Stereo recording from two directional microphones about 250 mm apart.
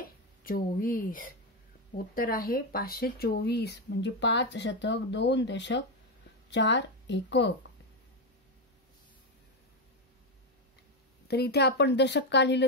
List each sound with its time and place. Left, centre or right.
0.0 s speech: left
11.2 s speech: left